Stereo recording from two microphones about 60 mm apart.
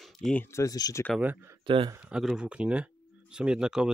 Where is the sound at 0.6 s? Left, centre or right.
Left.